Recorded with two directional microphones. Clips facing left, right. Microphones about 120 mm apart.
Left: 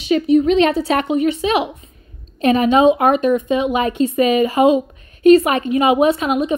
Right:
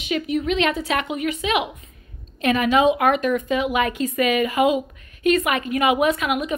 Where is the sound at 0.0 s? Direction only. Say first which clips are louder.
Left 9 dB; 30° left (ahead or behind).